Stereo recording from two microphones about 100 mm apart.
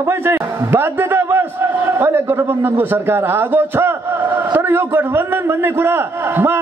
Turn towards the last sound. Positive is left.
turn(degrees=-25)  # may be behind; listen again after turning